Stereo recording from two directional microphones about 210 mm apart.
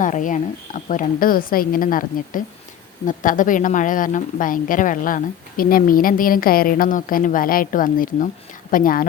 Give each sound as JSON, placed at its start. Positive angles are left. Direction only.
{"t": 0.0, "sound": "speech", "side_deg": 40}